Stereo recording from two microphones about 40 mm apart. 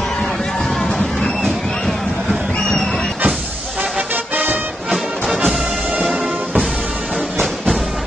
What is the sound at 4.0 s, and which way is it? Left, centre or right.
Music, right.